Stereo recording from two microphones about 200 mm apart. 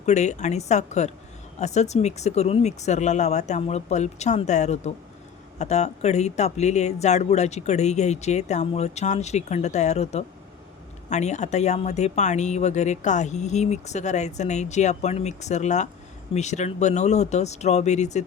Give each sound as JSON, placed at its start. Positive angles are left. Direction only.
{"t": 0.0, "sound": "speech", "side_deg": 35}